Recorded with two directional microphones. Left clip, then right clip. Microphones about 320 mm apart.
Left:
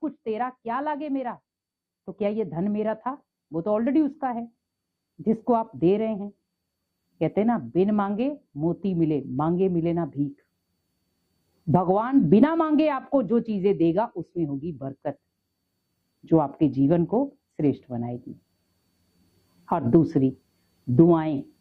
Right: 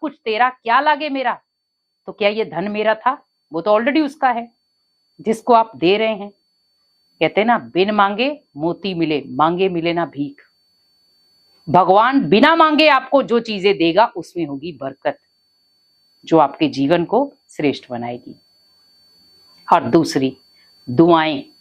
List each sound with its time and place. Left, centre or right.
0.0 s speech: centre
8.4 s a woman's voice: right
8.8 s speech: centre
11.7 s speech: centre
16.2 s speech: centre
19.6 s speech: centre